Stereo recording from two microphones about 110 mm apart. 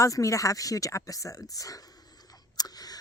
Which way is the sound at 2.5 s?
35° left (ahead or behind).